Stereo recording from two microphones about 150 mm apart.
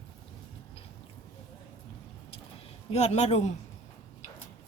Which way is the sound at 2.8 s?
45° left (ahead or behind).